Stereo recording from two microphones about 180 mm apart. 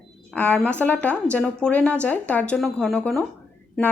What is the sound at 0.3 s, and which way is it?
A woman's voice, 10° left (ahead or behind).